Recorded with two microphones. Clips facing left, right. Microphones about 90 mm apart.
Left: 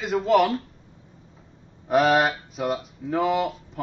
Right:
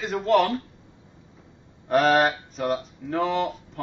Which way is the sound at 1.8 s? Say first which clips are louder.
Even; 5° left (ahead or behind).